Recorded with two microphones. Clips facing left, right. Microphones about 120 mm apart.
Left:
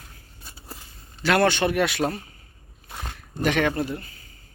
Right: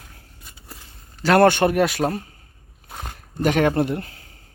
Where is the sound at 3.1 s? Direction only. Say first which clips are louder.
Right 3 dB; 45° right (ahead or behind).